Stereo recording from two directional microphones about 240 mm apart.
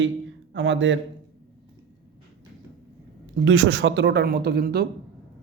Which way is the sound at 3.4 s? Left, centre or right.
Right.